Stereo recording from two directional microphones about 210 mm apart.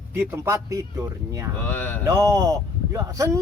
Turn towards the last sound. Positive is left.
turn(degrees=-15)  # may be behind; listen again after turning